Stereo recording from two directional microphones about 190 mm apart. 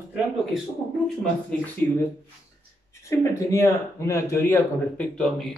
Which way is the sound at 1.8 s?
10° left (ahead or behind).